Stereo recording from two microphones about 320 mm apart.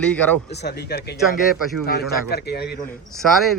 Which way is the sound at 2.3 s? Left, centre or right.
Left.